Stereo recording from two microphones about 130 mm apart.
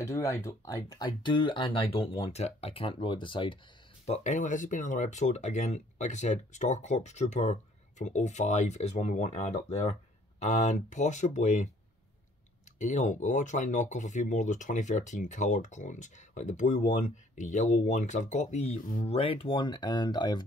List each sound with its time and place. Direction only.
0.0 s speech: 20° left (ahead or behind); by 3.5 s 40° left (ahead or behind)
4.0 s speech: 60° left (ahead or behind)
12.7 s speech: 65° left (ahead or behind)
19.0 s speech: 50° left (ahead or behind)